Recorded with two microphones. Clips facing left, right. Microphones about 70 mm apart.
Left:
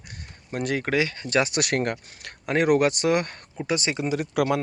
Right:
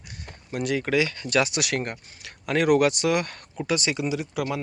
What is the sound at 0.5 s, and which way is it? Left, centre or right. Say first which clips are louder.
Speech: right 1 dB; left.